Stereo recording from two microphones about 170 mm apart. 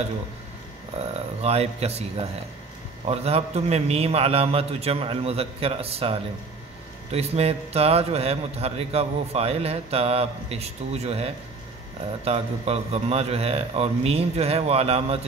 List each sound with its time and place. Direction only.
0.9 s a man's voice: 40° right (ahead or behind)
3.1 s a man's voice: 35° right (ahead or behind)